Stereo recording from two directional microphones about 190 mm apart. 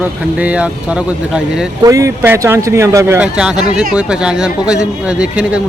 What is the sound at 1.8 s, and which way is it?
Speech, 15° right (ahead or behind).